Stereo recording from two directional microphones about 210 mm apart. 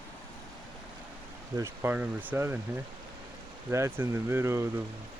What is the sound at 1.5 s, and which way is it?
Speech, 10° right (ahead or behind).